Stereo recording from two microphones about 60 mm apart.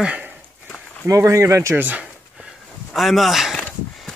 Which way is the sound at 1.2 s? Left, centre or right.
Right.